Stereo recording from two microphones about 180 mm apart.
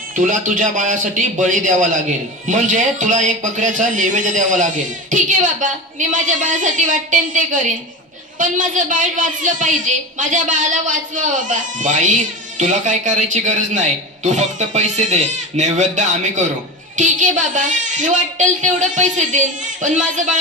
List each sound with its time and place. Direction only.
0.2 s a woman's voice: 50° right (ahead or behind)